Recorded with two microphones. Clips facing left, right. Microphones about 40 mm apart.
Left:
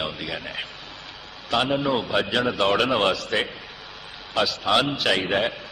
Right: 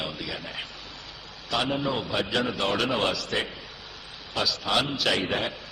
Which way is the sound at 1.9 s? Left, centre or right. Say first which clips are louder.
Left 4 dB; left.